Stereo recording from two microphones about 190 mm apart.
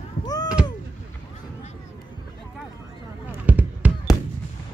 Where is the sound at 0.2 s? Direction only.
20° left (ahead or behind).